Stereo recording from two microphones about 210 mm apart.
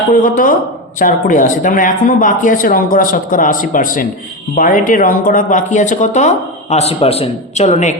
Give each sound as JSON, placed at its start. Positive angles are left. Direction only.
{"t": 0.1, "sound": "speech", "side_deg": 40}